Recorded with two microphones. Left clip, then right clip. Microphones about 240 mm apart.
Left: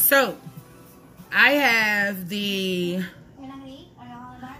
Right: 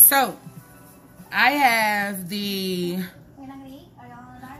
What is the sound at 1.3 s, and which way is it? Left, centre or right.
Speech, right.